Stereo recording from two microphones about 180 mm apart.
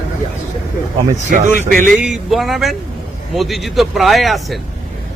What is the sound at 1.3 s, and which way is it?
Speech, 45° right (ahead or behind).